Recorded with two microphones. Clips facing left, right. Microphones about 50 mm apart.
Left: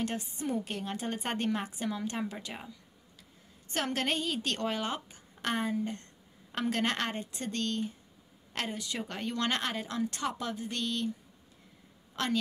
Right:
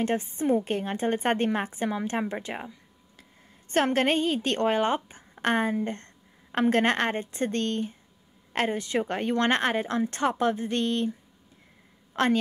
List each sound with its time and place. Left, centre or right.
0.0 s a woman's voice: right
12.2 s a woman's voice: right